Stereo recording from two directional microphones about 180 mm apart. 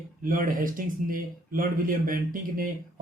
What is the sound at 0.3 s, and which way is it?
A man's voice, 50° right (ahead or behind).